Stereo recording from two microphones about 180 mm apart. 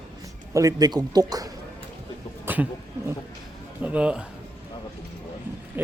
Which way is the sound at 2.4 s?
10° right (ahead or behind).